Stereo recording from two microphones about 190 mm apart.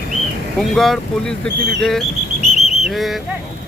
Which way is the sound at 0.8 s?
5° left (ahead or behind).